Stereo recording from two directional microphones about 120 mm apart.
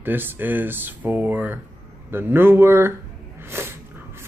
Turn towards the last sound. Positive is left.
turn(degrees=-20)  # may be behind; listen again after turning